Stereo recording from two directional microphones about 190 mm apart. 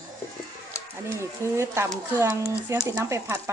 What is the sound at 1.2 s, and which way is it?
Speech, 15° right (ahead or behind).